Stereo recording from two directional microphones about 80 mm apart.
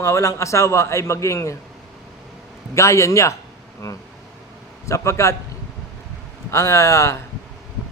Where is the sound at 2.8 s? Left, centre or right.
Left.